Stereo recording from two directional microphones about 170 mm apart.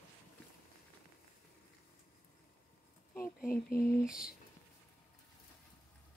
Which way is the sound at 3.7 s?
15° left (ahead or behind).